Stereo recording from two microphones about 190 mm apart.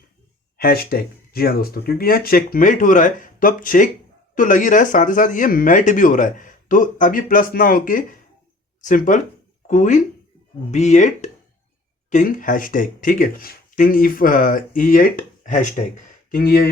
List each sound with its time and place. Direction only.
0.5 s speech: 50° left (ahead or behind)
16.3 s speech: 50° left (ahead or behind)